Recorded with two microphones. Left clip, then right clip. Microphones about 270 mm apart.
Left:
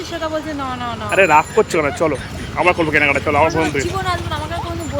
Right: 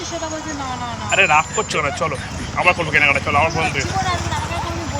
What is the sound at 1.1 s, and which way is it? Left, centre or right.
Speech, centre.